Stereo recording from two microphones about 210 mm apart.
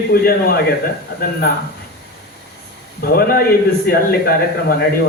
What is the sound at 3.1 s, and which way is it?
A man's voice, 45° left (ahead or behind).